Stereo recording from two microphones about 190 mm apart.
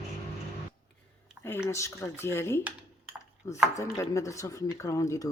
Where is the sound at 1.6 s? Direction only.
15° left (ahead or behind).